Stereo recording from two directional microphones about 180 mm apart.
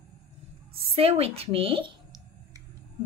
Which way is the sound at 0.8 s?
30° right (ahead or behind).